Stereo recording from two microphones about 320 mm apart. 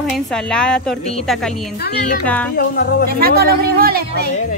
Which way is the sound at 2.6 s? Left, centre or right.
Left.